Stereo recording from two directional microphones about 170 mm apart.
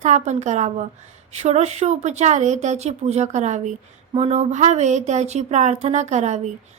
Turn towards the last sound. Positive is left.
turn(degrees=-45)  # may be behind; listen again after turning